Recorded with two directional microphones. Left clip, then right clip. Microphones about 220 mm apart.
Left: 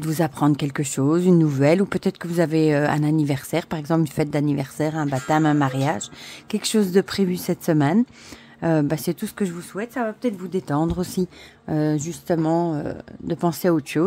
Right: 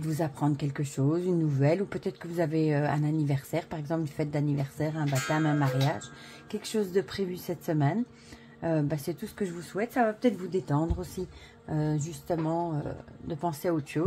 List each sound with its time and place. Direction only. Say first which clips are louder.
0.0 s speech: left 9 dB; 40° left (ahead or behind)
9.9 s speech: left 1 dB; 15° left (ahead or behind)
10.7 s speech: left 8 dB; 45° left (ahead or behind)